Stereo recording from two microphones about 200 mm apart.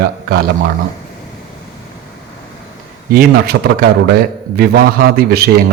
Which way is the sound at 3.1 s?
50° right (ahead or behind).